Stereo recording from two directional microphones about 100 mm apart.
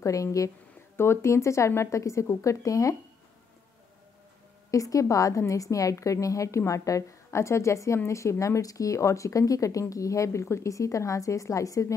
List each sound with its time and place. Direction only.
0.0 s a woman's voice: 35° left (ahead or behind)
4.6 s a woman's voice: 35° left (ahead or behind)